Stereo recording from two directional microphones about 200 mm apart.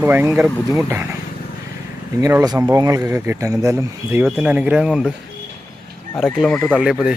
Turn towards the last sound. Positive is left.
turn(degrees=-5)  # may be behind; listen again after turning